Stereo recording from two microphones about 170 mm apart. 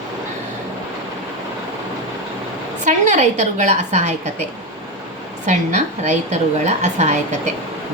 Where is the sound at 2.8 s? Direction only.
45° right (ahead or behind).